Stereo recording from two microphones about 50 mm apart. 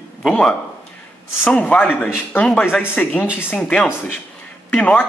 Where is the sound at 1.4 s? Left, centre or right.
Left.